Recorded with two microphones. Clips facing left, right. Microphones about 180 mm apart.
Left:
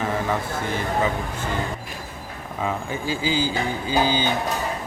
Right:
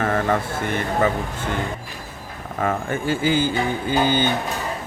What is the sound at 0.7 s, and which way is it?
Speech, 60° right (ahead or behind).